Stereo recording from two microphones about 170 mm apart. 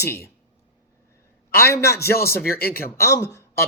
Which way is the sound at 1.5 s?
15° left (ahead or behind).